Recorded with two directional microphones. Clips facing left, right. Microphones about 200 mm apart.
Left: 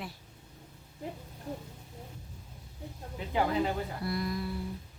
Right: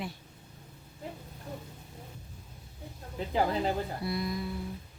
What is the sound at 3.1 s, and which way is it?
Speech, 35° right (ahead or behind).